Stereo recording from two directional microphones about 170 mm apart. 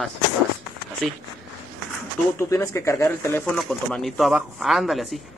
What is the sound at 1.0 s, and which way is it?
Speech, 5° left (ahead or behind).